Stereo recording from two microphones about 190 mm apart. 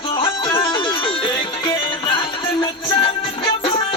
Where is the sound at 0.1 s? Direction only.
25° left (ahead or behind).